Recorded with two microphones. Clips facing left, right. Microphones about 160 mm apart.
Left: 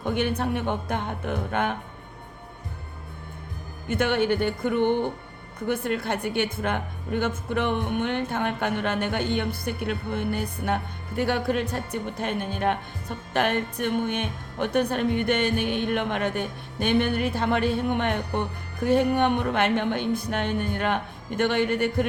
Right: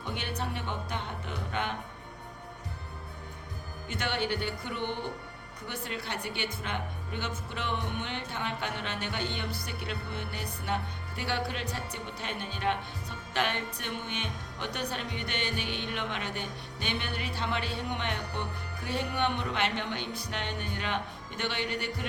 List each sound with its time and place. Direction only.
0.0 s a woman's voice: 50° left (ahead or behind)
3.8 s a woman's voice: 50° left (ahead or behind)